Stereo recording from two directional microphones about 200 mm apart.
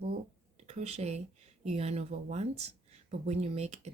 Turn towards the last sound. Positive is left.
turn(degrees=-35)  # may be behind; listen again after turning